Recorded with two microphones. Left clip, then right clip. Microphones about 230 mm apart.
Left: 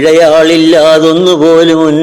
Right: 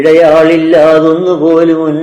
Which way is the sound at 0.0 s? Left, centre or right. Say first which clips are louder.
Even; left.